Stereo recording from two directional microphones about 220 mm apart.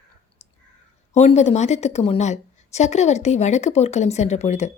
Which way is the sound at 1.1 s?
30° left (ahead or behind).